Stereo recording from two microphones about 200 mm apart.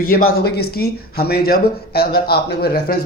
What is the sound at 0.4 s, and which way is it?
Speech, 50° left (ahead or behind).